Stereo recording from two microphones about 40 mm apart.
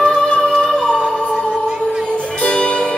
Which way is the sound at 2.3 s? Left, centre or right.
Left.